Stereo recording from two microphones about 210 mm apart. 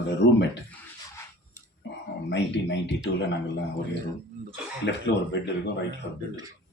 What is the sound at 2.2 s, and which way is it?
Speech, 55° left (ahead or behind).